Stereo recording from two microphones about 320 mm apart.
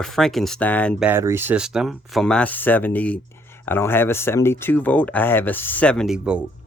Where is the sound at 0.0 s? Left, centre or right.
Centre.